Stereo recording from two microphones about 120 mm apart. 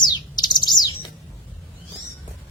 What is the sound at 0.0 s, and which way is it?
Bird, 35° left (ahead or behind).